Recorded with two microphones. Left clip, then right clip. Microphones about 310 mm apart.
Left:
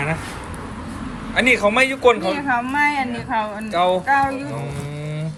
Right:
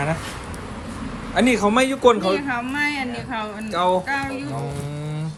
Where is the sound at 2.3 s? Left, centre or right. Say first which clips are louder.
Left 3 dB; centre.